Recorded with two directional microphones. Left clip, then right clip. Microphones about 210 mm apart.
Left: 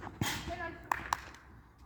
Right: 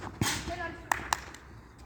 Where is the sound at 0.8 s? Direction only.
15° right (ahead or behind).